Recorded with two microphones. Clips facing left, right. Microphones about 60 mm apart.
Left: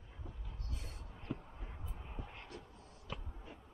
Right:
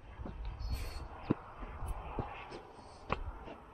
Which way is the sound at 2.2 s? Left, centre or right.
Right.